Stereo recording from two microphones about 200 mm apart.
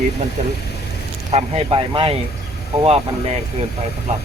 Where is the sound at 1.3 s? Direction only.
30° right (ahead or behind).